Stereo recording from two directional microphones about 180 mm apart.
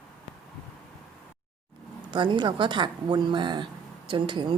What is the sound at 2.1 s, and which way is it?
Speech, 25° right (ahead or behind).